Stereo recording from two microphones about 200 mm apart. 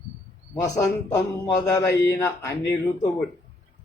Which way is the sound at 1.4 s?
15° left (ahead or behind).